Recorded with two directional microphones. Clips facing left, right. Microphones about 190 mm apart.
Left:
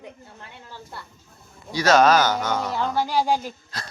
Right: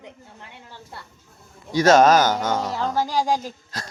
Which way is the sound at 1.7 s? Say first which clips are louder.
Right 2 dB; 50° right (ahead or behind).